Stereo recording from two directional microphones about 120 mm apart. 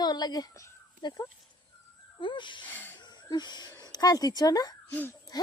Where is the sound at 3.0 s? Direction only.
35° left (ahead or behind).